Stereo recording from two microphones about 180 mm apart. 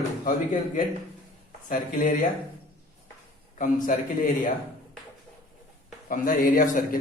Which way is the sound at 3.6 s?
45° left (ahead or behind).